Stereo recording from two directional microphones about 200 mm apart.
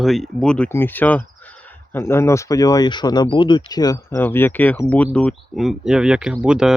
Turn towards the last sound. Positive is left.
turn(degrees=-5)  # may be behind; listen again after turning